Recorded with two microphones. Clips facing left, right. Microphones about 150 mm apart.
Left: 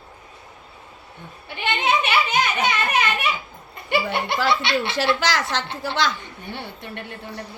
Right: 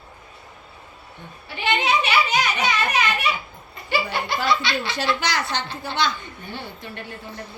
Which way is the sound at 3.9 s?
60° left (ahead or behind).